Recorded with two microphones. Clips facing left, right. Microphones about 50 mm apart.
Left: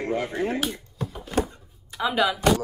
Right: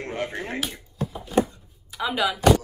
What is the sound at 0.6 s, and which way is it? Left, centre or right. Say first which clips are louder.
Speech: left 3 dB; centre.